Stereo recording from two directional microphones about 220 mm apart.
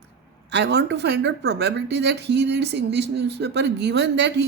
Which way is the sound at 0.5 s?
50° right (ahead or behind).